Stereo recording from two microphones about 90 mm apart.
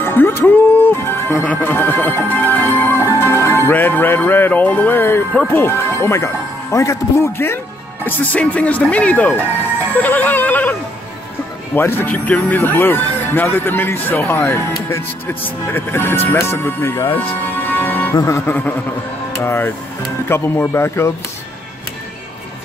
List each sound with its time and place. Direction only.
0.0 s music: 25° left (ahead or behind)
1.4 s speech: 20° left (ahead or behind)
2.9 s music: 30° left (ahead or behind)
5.5 s speech: 30° left (ahead or behind)
8.3 s music: 15° left (ahead or behind)
9.9 s speech: 20° left (ahead or behind)
17.1 s music: 20° left (ahead or behind)
18.1 s speech: 35° left (ahead or behind)
18.4 s speech: 20° left (ahead or behind)